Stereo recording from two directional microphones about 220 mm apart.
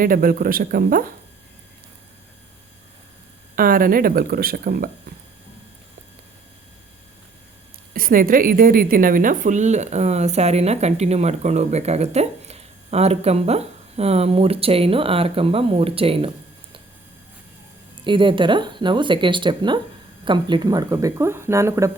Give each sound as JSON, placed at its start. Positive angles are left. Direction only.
{"t": 0.0, "sound": "speech", "side_deg": -40}
{"t": 3.5, "sound": "speech", "side_deg": -40}
{"t": 7.9, "sound": "a woman's voice", "side_deg": -40}
{"t": 18.0, "sound": "a woman's voice", "side_deg": -20}